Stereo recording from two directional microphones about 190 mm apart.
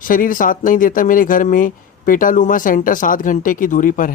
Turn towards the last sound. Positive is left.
turn(degrees=45)  # may be behind; listen again after turning